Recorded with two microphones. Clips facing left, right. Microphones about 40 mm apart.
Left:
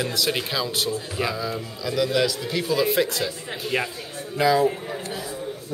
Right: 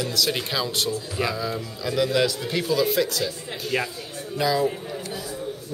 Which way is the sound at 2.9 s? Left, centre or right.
Left.